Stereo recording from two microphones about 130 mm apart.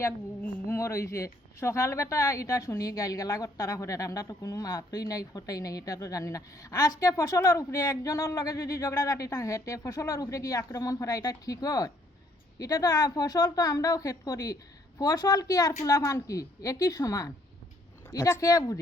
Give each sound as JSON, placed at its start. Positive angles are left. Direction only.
{"t": 0.0, "sound": "speech", "side_deg": 20}